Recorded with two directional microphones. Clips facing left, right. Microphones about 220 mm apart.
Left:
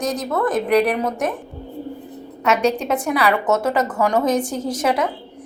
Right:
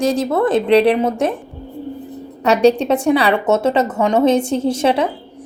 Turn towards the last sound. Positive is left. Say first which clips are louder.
# right 4 dB
turn(degrees=-30)  # may be behind; listen again after turning